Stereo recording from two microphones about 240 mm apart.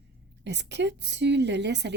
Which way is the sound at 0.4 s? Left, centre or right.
Right.